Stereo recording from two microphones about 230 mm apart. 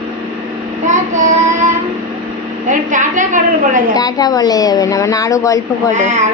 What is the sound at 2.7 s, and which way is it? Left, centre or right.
A woman's voice, right.